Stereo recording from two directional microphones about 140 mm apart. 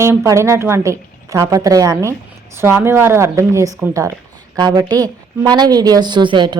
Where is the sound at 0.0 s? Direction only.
15° right (ahead or behind).